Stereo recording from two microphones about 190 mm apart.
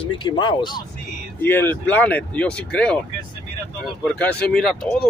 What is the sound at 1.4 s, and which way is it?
Speech, 10° left (ahead or behind).